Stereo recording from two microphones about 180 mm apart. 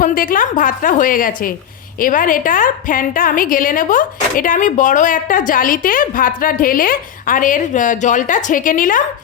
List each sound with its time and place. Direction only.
0.0 s a woman's voice: 50° left (ahead or behind)